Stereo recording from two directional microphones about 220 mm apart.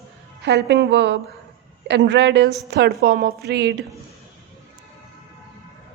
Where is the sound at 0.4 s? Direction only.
50° right (ahead or behind).